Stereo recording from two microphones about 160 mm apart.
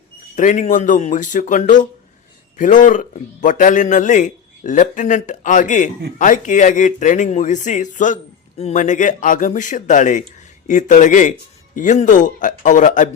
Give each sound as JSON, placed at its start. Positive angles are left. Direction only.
{"t": 0.3, "sound": "speech", "side_deg": 55}